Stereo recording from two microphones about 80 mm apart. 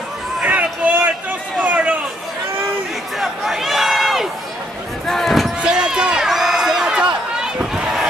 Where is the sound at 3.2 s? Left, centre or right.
Centre.